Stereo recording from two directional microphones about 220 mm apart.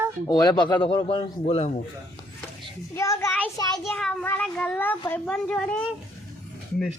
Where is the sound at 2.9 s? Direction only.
15° left (ahead or behind).